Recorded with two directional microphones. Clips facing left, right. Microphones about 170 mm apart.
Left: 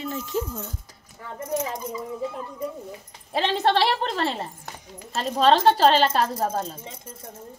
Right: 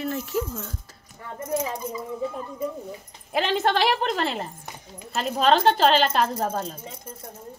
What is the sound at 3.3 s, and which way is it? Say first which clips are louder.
A woman's voice: left 1 dB; 35° left (ahead or behind).